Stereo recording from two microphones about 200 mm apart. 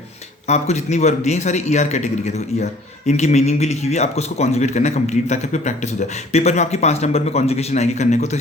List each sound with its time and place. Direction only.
0.4 s a man's voice: 35° left (ahead or behind)